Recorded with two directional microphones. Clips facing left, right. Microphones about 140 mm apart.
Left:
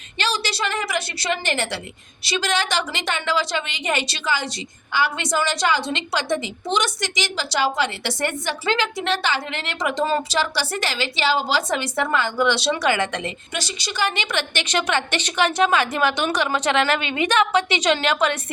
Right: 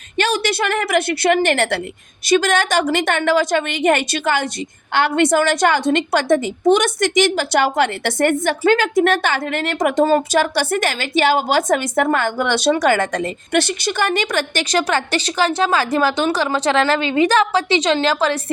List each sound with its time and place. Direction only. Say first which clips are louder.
0.2 s a woman's voice: right 6 dB; 50° right (ahead or behind)
13.5 s speech: right 11 dB; 60° right (ahead or behind); by 18.5 s 30° right (ahead or behind)